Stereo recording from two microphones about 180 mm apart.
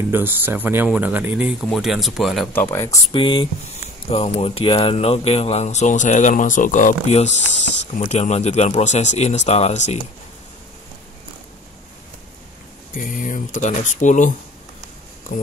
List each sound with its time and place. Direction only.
0.1 s speech: 10° right (ahead or behind)
2.5 s speech: 10° left (ahead or behind)
3.1 s speech: 30° left (ahead or behind)
12.9 s speech: 45° left (ahead or behind)